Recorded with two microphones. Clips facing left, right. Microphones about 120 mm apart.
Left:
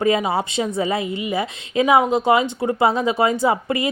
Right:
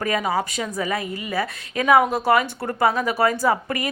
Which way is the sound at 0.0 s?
25° left (ahead or behind).